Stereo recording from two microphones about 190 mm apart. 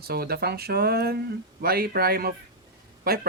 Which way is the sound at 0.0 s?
55° right (ahead or behind).